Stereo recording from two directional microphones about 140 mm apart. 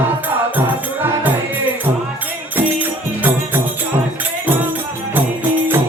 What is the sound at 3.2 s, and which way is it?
Music, 15° right (ahead or behind).